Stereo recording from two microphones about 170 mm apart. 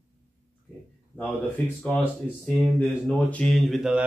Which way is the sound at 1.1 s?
10° left (ahead or behind).